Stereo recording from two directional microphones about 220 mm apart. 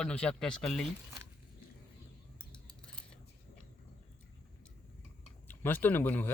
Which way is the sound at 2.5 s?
5° left (ahead or behind).